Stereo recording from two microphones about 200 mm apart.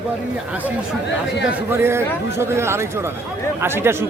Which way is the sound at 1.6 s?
10° right (ahead or behind).